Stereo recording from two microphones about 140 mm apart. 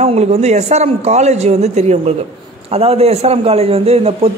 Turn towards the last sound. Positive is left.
turn(degrees=-45)  # may be behind; listen again after turning